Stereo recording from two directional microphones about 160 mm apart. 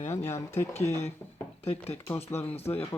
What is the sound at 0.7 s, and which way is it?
Speech, 45° left (ahead or behind).